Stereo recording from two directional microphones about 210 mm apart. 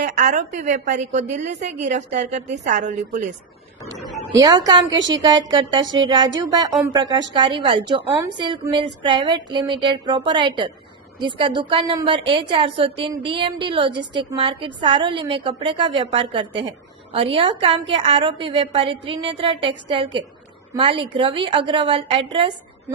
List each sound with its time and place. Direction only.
0.2 s a woman's voice: 35° right (ahead or behind)
4.4 s a woman's voice: 20° right (ahead or behind)
4.9 s a woman's voice: 60° right (ahead or behind)
5.1 s a woman's voice: 20° right (ahead or behind)